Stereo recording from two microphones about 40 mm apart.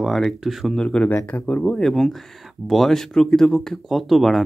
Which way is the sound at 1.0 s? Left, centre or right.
Left.